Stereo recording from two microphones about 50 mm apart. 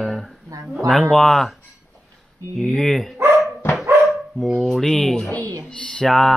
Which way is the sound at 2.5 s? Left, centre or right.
Centre.